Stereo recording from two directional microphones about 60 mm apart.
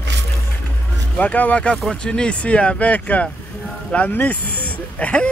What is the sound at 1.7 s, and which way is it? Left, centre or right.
Speech, centre.